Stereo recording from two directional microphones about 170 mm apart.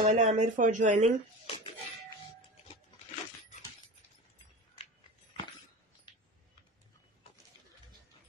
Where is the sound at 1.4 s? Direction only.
35° left (ahead or behind).